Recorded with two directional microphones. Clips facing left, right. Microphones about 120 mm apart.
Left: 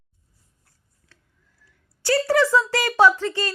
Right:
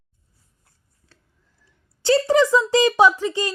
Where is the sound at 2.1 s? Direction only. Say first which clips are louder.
Right 3 dB; 20° right (ahead or behind).